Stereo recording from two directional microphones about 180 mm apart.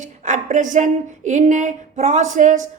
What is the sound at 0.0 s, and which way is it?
A woman's voice, 45° right (ahead or behind).